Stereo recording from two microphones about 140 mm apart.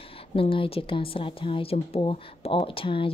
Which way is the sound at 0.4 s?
40° left (ahead or behind).